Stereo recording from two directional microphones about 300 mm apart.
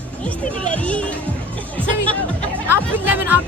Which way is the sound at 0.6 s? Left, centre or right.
Centre.